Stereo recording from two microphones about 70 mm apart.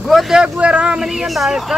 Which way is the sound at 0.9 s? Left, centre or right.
Centre.